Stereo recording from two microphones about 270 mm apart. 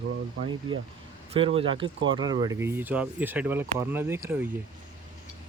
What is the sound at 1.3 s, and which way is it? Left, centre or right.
Speech, right.